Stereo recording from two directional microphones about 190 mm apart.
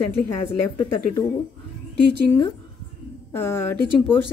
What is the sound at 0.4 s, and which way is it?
Speech, 25° left (ahead or behind).